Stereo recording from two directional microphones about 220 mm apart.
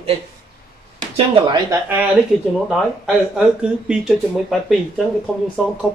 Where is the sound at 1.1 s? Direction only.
25° right (ahead or behind).